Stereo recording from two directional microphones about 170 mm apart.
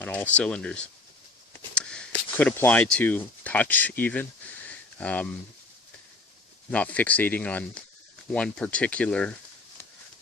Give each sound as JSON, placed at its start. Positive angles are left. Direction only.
{"t": 0.0, "sound": "speech", "side_deg": 10}
{"t": 6.7, "sound": "speech", "side_deg": 10}